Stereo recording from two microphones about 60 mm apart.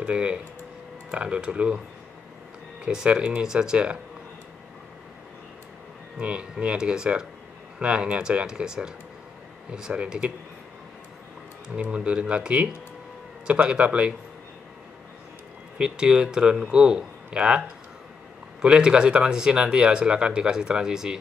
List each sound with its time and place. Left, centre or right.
0.0 s speech: centre
2.8 s speech: centre
6.1 s speech: centre
11.7 s speech: centre
15.8 s speech: centre